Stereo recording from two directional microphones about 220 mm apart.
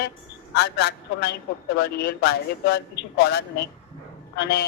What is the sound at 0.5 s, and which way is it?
Speech, 50° left (ahead or behind).